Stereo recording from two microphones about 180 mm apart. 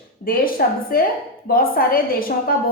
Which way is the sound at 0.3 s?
55° left (ahead or behind).